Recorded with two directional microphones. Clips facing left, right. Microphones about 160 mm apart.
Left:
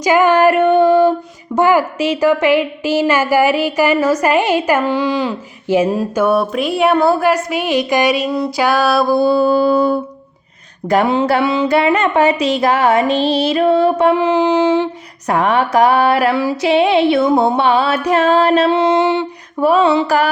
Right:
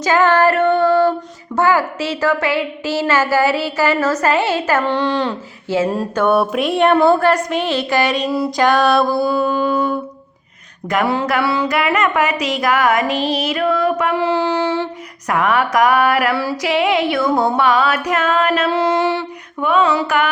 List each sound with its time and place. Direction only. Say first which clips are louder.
0.0 s music: left 3 dB; 15° left (ahead or behind)
1.5 s a woman's voice: left 3 dB; 15° left (ahead or behind)
5.9 s a woman's voice: left 1 dB; 5° left (ahead or behind)
8.3 s music: even; centre (ahead or behind)
9.1 s mantra: left 5 dB; 30° left (ahead or behind)
10.8 s a sound: left 4 dB; 30° left (ahead or behind)
15.3 s a sound: left 2 dB; 30° left (ahead or behind)
19.5 s mantra: left 4 dB; 35° left (ahead or behind)